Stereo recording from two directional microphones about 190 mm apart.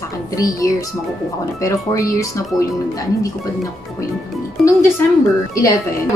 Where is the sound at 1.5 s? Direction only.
15° left (ahead or behind).